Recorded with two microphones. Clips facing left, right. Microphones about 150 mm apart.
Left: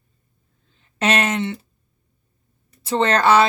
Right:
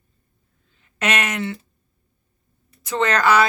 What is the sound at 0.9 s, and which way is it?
Speech, 30° left (ahead or behind).